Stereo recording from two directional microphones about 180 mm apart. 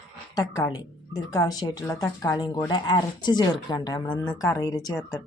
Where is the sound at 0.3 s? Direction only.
20° left (ahead or behind).